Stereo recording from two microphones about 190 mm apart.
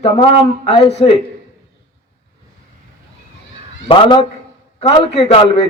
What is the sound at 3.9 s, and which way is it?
Speech, 25° left (ahead or behind).